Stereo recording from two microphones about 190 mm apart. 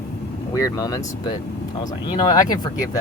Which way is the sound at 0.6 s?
15° left (ahead or behind).